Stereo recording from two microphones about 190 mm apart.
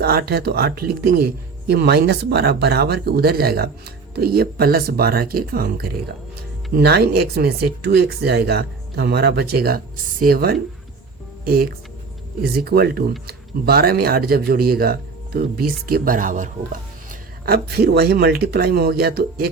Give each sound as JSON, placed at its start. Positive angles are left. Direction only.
{"t": 0.0, "sound": "speech", "side_deg": -55}
{"t": 17.1, "sound": "speech", "side_deg": -55}